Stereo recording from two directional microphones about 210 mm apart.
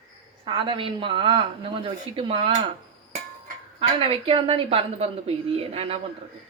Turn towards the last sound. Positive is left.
turn(degrees=-25)  # may be behind; listen again after turning